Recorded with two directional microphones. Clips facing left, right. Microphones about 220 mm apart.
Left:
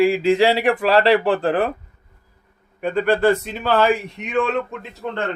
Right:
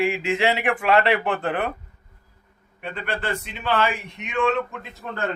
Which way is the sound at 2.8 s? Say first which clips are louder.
Left 12 dB; 40° left (ahead or behind).